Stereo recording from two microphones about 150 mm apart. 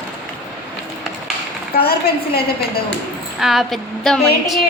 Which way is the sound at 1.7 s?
90° left.